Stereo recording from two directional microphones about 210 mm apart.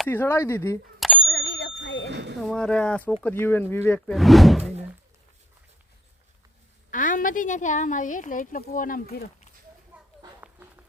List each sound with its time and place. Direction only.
0.0 s speech: 10° left (ahead or behind)
0.9 s bicycle bell: centre (ahead or behind)
1.2 s bicycle bell: 55° left (ahead or behind)
2.0 s a sound: 55° right (ahead or behind)
2.4 s speech: 5° left (ahead or behind)
6.9 s a woman's voice: 40° left (ahead or behind)
9.9 s a sound: 5° right (ahead or behind)
10.4 s run: 10° right (ahead or behind)